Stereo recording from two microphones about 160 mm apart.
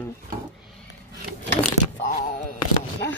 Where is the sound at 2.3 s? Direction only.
55° left (ahead or behind).